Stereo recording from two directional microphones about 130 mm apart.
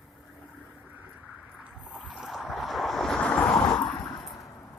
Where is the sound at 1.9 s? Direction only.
5° right (ahead or behind).